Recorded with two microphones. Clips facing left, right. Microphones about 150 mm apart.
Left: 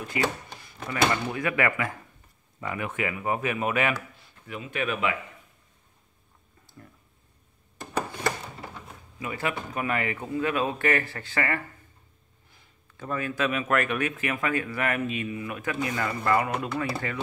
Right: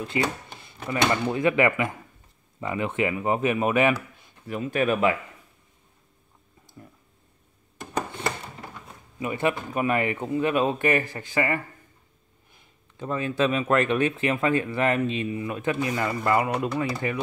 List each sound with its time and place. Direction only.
0.0 s a sound: 25° right (ahead or behind)
0.8 s speech: 25° right (ahead or behind)
4.5 s speech: 40° right (ahead or behind)
9.2 s speech: 25° right (ahead or behind)
12.9 s speech: 25° right (ahead or behind)